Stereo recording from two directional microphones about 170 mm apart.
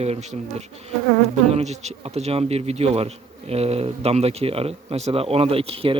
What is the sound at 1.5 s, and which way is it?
Speech, 40° right (ahead or behind).